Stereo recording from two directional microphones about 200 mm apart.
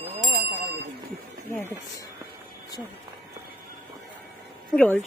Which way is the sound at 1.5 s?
15° left (ahead or behind).